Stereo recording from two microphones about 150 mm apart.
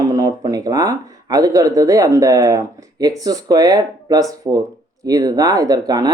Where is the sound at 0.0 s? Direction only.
20° right (ahead or behind).